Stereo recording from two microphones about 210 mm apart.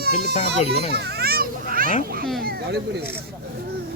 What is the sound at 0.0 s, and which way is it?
Speech, 50° right (ahead or behind).